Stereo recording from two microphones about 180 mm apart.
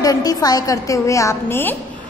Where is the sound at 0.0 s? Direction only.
20° left (ahead or behind).